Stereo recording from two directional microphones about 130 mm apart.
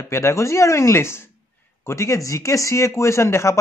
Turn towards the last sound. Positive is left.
turn(degrees=20)  # may be behind; listen again after turning